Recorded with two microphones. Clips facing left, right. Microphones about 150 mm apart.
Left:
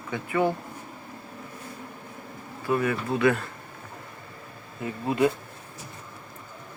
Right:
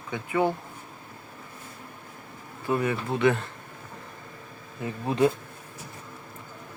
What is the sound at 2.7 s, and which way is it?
Speech, 20° right (ahead or behind).